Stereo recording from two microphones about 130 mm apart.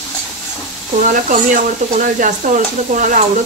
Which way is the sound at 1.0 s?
85° right.